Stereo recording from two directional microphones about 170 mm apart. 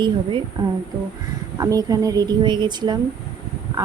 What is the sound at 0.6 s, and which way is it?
A woman's voice, 20° right (ahead or behind).